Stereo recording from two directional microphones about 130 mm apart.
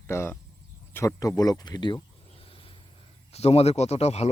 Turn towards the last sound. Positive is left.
turn(degrees=55)  # may be behind; listen again after turning